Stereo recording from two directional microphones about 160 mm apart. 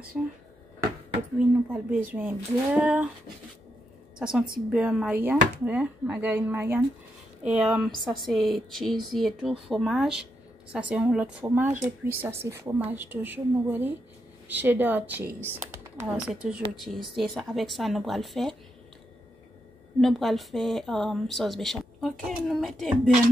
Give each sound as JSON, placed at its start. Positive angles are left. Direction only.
{"t": 0.2, "sound": "speech", "side_deg": -5}
{"t": 1.7, "sound": "speech", "side_deg": -10}
{"t": 4.2, "sound": "a woman's voice", "side_deg": -5}
{"t": 20.0, "sound": "a woman's voice", "side_deg": 0}